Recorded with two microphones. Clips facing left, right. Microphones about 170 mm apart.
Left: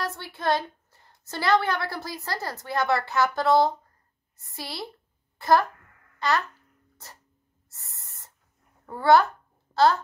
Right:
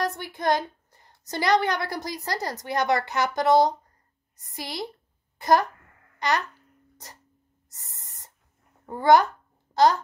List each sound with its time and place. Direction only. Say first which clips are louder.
0.0 s a sound: right 3 dB; 15° right (ahead or behind)
1.2 s a woman's voice: right 1 dB; 15° right (ahead or behind)
6.1 s babbling: even; 15° right (ahead or behind)
7.7 s owl: even; 15° right (ahead or behind)
8.8 s a woman's voice: right 1 dB; 15° right (ahead or behind)